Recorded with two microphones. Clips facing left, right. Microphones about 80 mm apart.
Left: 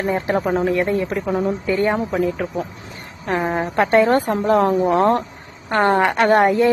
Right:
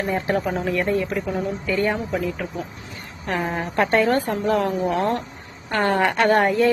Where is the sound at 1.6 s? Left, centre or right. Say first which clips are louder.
Left 4 dB; left.